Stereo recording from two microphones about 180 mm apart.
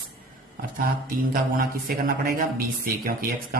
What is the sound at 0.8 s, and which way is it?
Speech, 50° right (ahead or behind).